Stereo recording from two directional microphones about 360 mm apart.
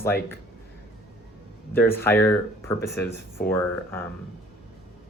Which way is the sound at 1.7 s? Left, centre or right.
Centre.